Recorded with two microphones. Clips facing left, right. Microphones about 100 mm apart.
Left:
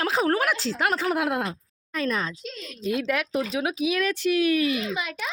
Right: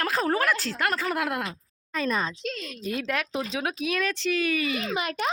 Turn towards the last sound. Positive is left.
turn(degrees=-55)  # may be behind; listen again after turning